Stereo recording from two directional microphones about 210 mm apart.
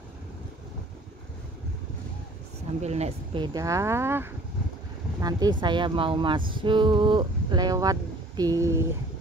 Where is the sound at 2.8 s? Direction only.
30° right (ahead or behind); by 8.9 s 15° right (ahead or behind).